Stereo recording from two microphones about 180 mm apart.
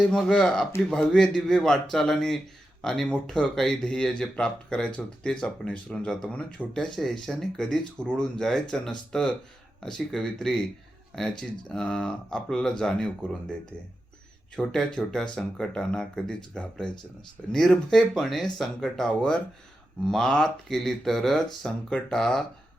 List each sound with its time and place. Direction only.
0.1 s speech: 5° left (ahead or behind)
14.5 s speech: 5° left (ahead or behind)